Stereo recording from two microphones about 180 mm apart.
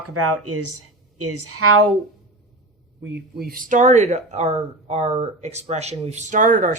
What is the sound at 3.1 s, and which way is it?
Speech, 65° right (ahead or behind).